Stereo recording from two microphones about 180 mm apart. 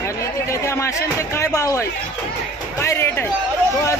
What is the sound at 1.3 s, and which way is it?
Speech, 15° left (ahead or behind).